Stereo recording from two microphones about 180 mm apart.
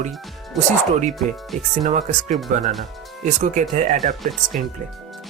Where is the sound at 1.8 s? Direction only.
45° right (ahead or behind).